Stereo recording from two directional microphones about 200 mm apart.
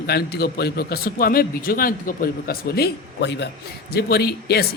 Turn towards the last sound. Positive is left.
turn(degrees=55)  # may be behind; listen again after turning